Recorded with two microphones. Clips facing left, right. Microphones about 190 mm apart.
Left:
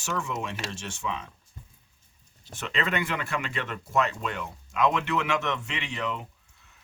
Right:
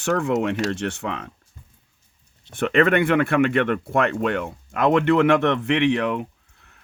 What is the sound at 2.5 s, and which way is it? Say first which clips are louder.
Speech: right 12 dB; 55° right (ahead or behind).